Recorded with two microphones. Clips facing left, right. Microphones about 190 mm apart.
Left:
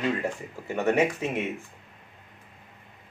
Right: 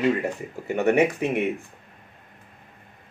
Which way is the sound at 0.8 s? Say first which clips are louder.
Right 4 dB; 15° right (ahead or behind).